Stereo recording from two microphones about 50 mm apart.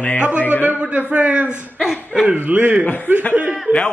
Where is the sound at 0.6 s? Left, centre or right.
Right.